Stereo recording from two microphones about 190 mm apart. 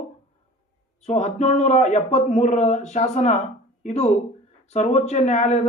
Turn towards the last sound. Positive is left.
turn(degrees=35)  # may be behind; listen again after turning